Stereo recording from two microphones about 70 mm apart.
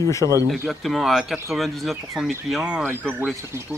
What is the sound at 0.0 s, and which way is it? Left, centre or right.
Speech, left.